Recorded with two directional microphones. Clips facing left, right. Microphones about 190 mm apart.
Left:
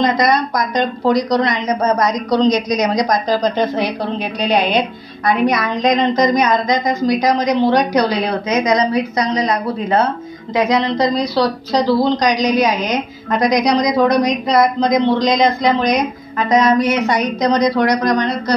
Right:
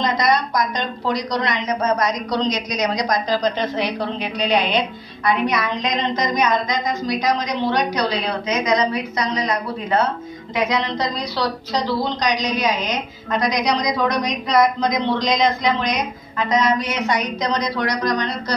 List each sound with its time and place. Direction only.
0.0 s a woman's voice: 45° left (ahead or behind)
16.4 s a woman's voice: 45° left (ahead or behind)